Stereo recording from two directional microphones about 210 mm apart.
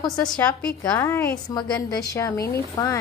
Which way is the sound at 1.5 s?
20° left (ahead or behind).